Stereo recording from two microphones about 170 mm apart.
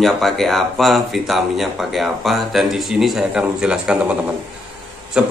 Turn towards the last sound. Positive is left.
turn(degrees=-5)  # may be behind; listen again after turning